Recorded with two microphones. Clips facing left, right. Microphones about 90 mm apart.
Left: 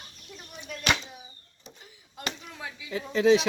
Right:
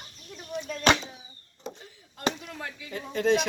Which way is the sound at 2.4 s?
5° left (ahead or behind).